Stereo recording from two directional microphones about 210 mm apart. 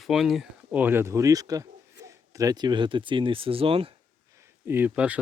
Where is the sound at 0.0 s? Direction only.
Centre (ahead or behind); by 3.9 s 25° right (ahead or behind).